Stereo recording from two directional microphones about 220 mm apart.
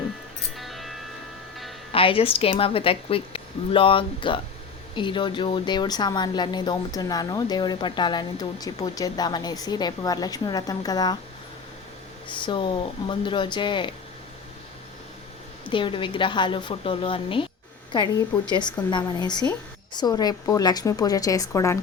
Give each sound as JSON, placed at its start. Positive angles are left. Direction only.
{"t": 0.5, "sound": "music", "side_deg": 0}
{"t": 1.9, "sound": "speech", "side_deg": 25}
{"t": 12.3, "sound": "speech", "side_deg": 20}
{"t": 15.7, "sound": "a woman's voice", "side_deg": 25}